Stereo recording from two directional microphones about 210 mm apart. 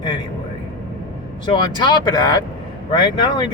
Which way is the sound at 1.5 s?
20° left (ahead or behind).